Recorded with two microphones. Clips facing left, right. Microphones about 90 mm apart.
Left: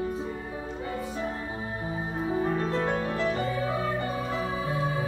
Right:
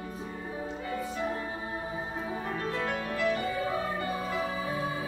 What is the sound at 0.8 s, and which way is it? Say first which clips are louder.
Music: left 1 dB; 25° left (ahead or behind).